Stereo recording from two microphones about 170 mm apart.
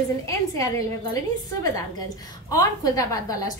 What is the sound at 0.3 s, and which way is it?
A woman's voice, 20° left (ahead or behind).